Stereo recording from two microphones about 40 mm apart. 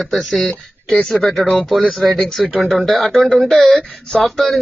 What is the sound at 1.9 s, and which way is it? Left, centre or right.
Speech, centre.